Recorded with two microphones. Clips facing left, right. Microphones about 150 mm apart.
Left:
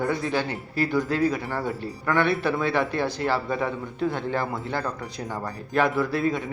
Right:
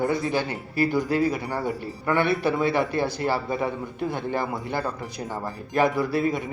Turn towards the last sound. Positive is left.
turn(degrees=-5)  # may be behind; listen again after turning